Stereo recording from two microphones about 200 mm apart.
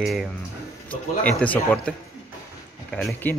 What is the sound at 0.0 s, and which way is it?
Speech, centre (ahead or behind).